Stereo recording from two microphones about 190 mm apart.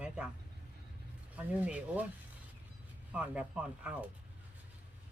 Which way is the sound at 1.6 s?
10° right (ahead or behind).